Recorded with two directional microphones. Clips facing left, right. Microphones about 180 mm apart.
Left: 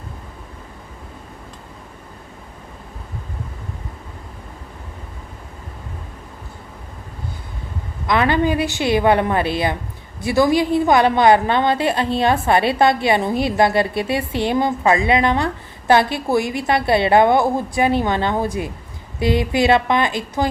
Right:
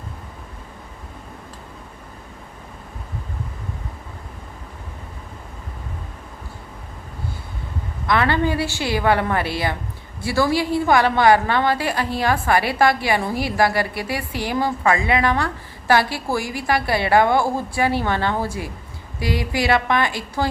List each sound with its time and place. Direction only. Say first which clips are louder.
8.0 s a woman's voice: left 2 dB; 20° left (ahead or behind)